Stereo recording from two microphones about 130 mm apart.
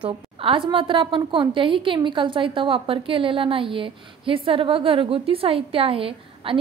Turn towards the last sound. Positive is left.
turn(degrees=-45)  # may be behind; listen again after turning